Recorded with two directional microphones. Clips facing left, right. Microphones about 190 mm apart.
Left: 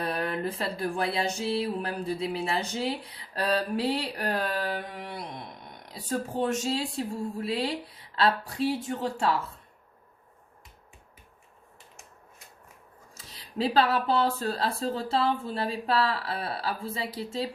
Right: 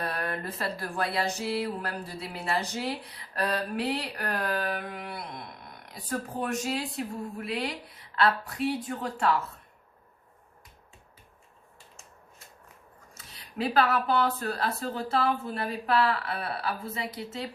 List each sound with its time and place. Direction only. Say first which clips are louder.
0.0 s music: left 3 dB; 25° left (ahead or behind)
13.1 s music: left 2 dB; 30° left (ahead or behind)